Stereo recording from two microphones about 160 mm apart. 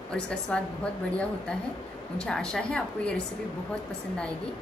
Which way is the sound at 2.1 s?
5° left (ahead or behind).